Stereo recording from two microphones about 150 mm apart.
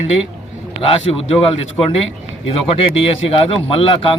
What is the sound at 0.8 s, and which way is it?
A man's voice, 40° left (ahead or behind).